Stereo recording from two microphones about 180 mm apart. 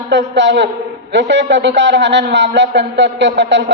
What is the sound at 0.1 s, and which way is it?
A man's voice, 75° right (ahead or behind).